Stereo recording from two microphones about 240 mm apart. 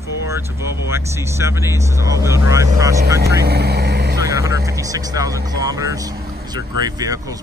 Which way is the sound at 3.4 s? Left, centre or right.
Right.